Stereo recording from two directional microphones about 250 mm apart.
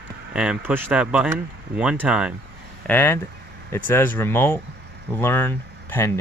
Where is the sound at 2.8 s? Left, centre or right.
Centre.